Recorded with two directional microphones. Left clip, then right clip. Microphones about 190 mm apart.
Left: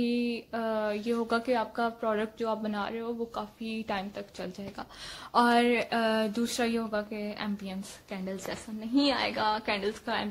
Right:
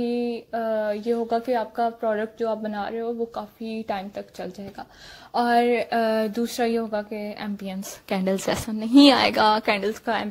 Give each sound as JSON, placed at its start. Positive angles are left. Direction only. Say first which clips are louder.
{"t": 0.0, "sound": "speech", "louder": "right 5 dB", "side_deg": -10}
{"t": 1.2, "sound": "speech", "louder": "right 5 dB", "side_deg": -5}
{"t": 1.5, "sound": "speech", "louder": "right 5 dB", "side_deg": -15}
{"t": 5.3, "sound": "speech", "louder": "right 4 dB", "side_deg": -5}
{"t": 8.1, "sound": "a woman's voice", "louder": "right 13 dB", "side_deg": -45}